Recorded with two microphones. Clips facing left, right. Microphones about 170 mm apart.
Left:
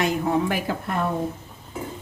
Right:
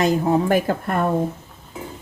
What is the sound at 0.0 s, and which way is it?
Speech, 35° right (ahead or behind).